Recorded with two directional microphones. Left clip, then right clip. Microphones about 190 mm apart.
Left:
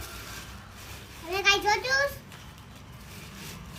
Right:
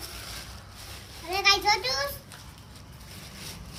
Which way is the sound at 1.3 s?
20° right (ahead or behind).